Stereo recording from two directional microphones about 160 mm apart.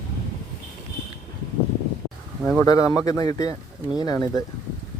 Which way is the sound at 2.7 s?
20° left (ahead or behind).